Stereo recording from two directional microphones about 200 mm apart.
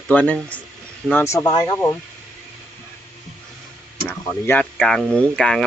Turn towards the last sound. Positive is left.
turn(degrees=5)  # may be behind; listen again after turning